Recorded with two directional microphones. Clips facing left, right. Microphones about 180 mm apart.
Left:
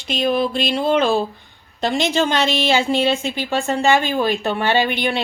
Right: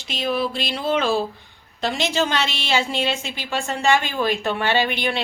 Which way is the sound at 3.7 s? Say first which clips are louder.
Left 3 dB; 35° left (ahead or behind).